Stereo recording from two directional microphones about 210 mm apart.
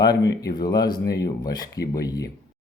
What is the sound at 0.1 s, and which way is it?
Speech, 55° left (ahead or behind).